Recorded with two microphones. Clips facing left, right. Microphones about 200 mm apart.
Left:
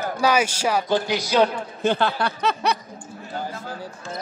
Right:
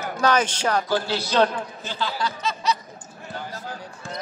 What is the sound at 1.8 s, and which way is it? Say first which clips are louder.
Speech: left 9 dB; 60° left (ahead or behind).